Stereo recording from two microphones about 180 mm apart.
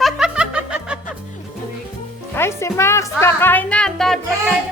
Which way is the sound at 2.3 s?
15° left (ahead or behind).